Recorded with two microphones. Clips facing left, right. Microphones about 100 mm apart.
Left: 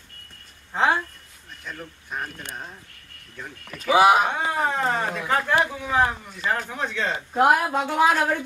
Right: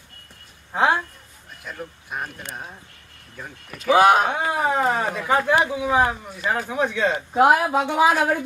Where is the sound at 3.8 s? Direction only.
Centre (ahead or behind).